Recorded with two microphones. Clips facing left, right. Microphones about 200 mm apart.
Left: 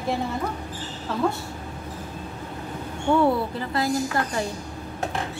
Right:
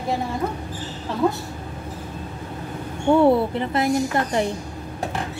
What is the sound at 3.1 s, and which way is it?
A woman's voice, 25° right (ahead or behind).